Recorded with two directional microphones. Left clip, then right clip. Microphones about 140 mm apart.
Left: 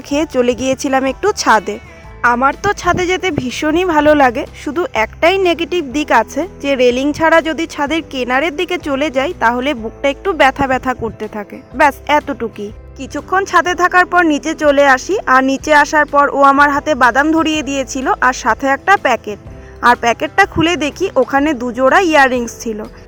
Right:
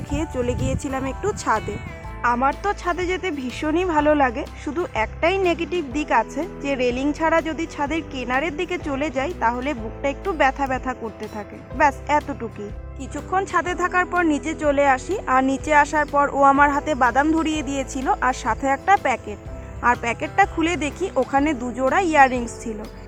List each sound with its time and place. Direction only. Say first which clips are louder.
0.1 s speech: left 11 dB; 70° left (ahead or behind)
2.2 s a woman's voice: left 8 dB; 40° left (ahead or behind)